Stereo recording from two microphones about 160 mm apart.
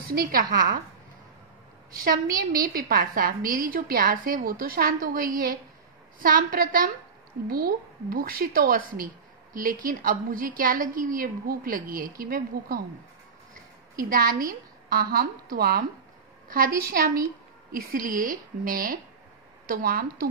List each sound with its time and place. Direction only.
0.3 s a woman's voice: 60° right (ahead or behind)
1.9 s a woman's voice: 65° right (ahead or behind)
13.9 s a woman's voice: 60° right (ahead or behind)